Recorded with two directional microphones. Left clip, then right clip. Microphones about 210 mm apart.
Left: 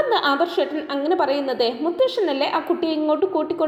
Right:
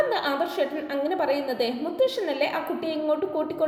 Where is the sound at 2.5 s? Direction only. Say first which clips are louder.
Left 6 dB; 15° left (ahead or behind).